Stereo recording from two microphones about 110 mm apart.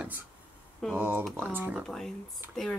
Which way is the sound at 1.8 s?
Centre (ahead or behind).